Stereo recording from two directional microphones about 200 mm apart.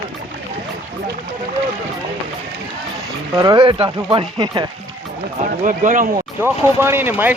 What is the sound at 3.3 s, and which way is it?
Speech, 20° right (ahead or behind).